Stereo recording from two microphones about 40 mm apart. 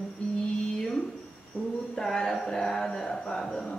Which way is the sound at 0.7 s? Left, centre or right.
Centre.